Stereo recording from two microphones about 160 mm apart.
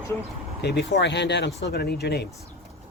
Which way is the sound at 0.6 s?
90° left.